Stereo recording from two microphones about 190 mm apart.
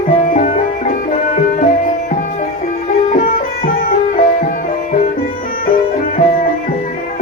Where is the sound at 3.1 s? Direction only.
45° left (ahead or behind).